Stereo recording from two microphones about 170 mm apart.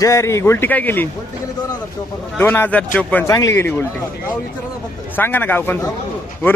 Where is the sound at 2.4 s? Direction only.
10° left (ahead or behind).